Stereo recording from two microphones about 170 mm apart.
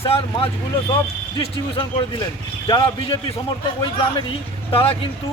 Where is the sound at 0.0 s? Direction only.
30° left (ahead or behind).